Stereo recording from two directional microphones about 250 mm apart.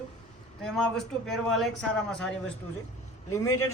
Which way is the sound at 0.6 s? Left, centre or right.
Centre.